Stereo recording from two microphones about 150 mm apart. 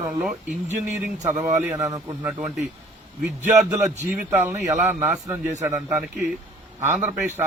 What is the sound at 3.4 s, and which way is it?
A man's voice, 15° right (ahead or behind).